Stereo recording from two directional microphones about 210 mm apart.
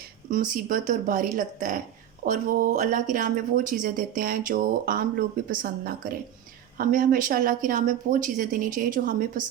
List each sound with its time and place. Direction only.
0.5 s speech: 40° right (ahead or behind)